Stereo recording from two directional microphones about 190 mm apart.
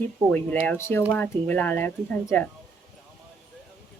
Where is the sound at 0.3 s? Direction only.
10° left (ahead or behind).